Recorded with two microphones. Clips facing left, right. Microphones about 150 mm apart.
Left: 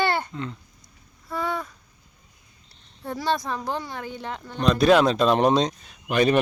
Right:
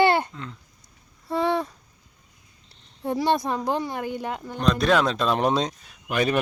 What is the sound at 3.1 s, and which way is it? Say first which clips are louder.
Speech: right 3 dB; 20° right (ahead or behind).